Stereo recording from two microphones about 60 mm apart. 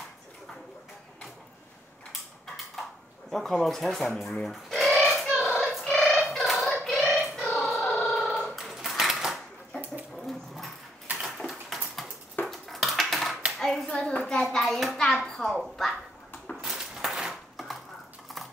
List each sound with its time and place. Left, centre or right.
2.4 s a sound: centre
3.3 s speech: centre
4.2 s bird: centre
5.6 s singing: centre
7.6 s music: centre
8.1 s a sound: centre
10.1 s dog: centre
11.3 s a sound: centre
12.4 s dishes: centre
13.6 s hands: centre
13.8 s child singing: centre
14.4 s hands: centre
15.2 s a sound: centre
16.6 s dishes: centre